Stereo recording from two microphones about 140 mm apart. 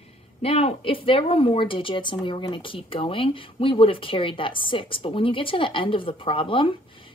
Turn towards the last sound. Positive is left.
turn(degrees=40)  # may be behind; listen again after turning